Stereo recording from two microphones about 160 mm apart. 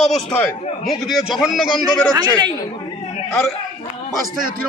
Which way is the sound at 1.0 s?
Centre (ahead or behind).